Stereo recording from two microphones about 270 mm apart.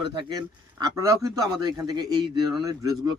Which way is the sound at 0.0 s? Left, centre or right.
Centre.